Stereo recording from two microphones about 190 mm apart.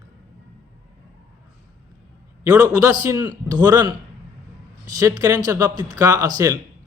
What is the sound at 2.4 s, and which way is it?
A man's voice, 20° right (ahead or behind).